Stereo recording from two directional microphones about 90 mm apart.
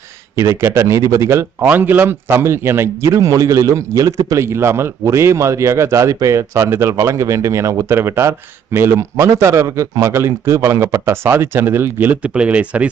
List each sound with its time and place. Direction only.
0.3 s a man's voice: 35° right (ahead or behind)
4.4 s a man's voice: 30° right (ahead or behind)